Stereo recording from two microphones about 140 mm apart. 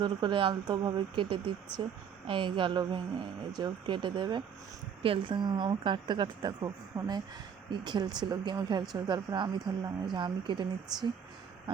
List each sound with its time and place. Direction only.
0.0 s speech: 30° right (ahead or behind)